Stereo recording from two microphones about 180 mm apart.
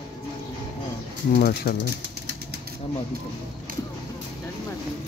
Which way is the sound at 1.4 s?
60° left (ahead or behind).